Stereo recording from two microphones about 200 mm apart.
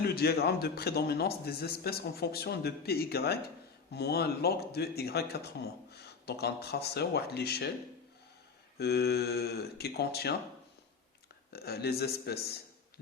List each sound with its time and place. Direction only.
0.0 s a man's voice: 50° left (ahead or behind)
8.8 s a man's voice: 55° left (ahead or behind)
11.5 s a man's voice: 50° left (ahead or behind)